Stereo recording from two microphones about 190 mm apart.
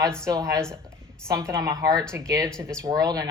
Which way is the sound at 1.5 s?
15° right (ahead or behind).